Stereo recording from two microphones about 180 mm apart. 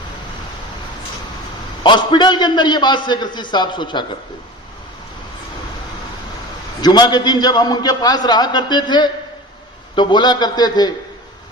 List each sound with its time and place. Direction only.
1.8 s a man's voice: 25° left (ahead or behind)
6.8 s a man's voice: 25° left (ahead or behind)